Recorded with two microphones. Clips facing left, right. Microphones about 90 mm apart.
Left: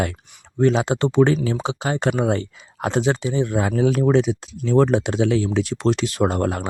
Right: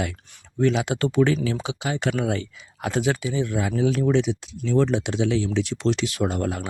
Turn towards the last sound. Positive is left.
turn(degrees=45)  # may be behind; listen again after turning